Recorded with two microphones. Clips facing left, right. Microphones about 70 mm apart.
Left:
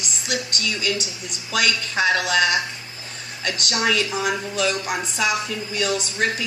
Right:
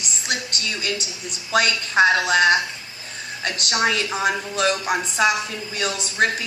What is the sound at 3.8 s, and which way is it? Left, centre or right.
Speech, right.